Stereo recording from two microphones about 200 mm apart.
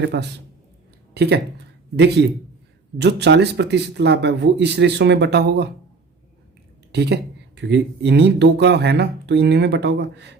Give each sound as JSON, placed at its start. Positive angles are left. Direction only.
{"t": 0.0, "sound": "speech", "side_deg": -55}
{"t": 6.9, "sound": "speech", "side_deg": -55}